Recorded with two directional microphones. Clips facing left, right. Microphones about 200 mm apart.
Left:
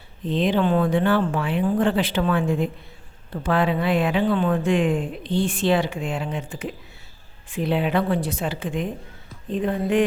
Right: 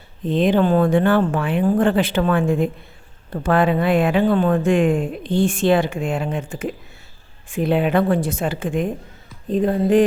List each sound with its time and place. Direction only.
0.3 s a woman's voice: 50° right (ahead or behind)